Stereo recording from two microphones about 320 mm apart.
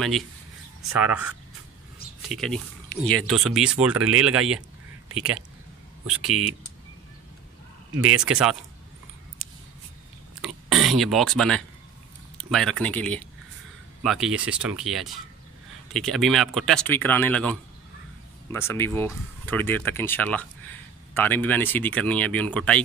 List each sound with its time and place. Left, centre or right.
0.9 s speech: centre
7.9 s speech: right
8.2 s speech: centre
10.4 s speech: centre